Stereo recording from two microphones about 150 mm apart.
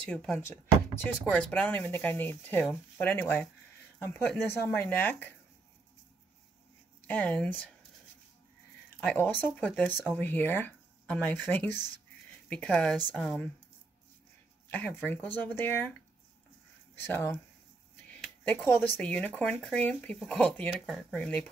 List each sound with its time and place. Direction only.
0.0 s speech: 5° left (ahead or behind)
7.1 s speech: 10° left (ahead or behind)
9.0 s speech: 10° left (ahead or behind)
14.7 s speech: 10° left (ahead or behind)
17.0 s speech: 15° left (ahead or behind)